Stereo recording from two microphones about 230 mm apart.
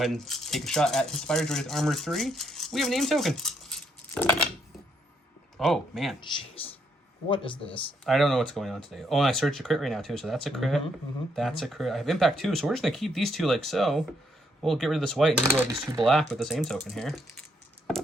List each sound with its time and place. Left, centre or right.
0.0 s speech: centre
5.5 s speech: centre
7.3 s speech: left
7.7 s speech: centre
15.5 s speech: centre
16.0 s speech: centre